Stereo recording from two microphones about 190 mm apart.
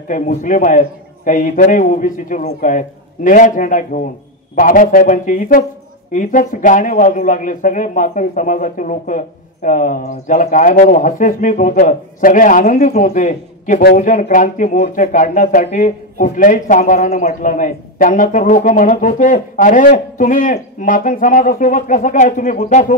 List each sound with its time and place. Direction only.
0.1 s a man's voice: 40° left (ahead or behind)